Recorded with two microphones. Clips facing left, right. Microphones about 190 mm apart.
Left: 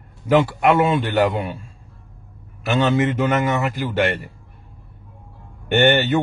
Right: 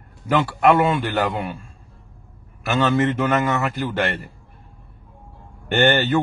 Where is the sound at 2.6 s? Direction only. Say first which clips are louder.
Left 1 dB; 20° left (ahead or behind).